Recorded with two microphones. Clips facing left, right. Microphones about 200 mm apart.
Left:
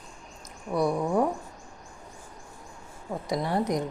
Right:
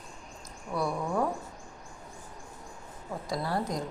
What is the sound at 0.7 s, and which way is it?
Speech, 20° left (ahead or behind).